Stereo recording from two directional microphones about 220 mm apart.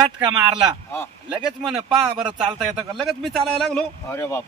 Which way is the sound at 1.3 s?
5° right (ahead or behind).